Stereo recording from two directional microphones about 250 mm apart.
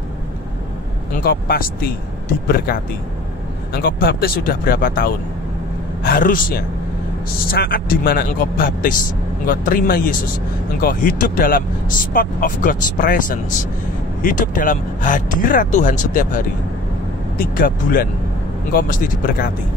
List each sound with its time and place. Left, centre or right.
1.1 s speech: left
17.4 s speech: left